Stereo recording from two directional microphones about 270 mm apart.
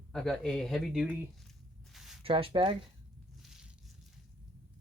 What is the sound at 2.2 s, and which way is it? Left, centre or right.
Speech, centre.